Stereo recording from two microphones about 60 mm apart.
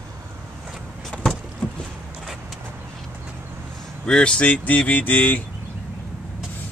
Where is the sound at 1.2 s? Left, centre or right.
Centre.